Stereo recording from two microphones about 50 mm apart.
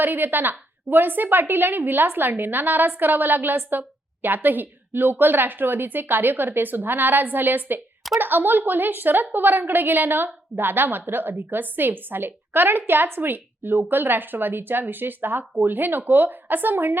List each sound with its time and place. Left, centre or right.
0.0 s a woman's voice: right